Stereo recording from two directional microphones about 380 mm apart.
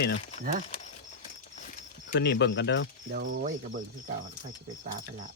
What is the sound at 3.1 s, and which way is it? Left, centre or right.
Speech, right.